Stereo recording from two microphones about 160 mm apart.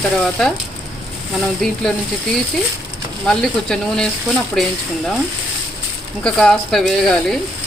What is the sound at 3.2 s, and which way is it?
Speech, 5° left (ahead or behind).